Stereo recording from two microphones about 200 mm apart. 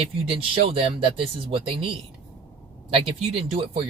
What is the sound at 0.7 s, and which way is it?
Speech, 25° right (ahead or behind).